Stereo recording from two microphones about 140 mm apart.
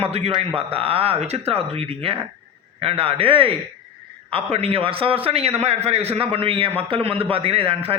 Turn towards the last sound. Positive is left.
turn(degrees=-45)  # may be behind; listen again after turning